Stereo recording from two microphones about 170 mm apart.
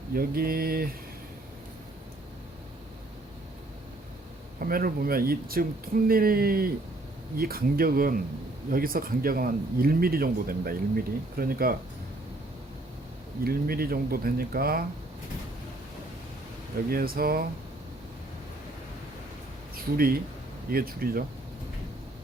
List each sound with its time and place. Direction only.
0.1 s speech: 60° right (ahead or behind)
4.6 s speech: 60° right (ahead or behind)
13.4 s speech: 60° right (ahead or behind)
16.9 s speech: 60° right (ahead or behind)
19.7 s speech: 60° right (ahead or behind)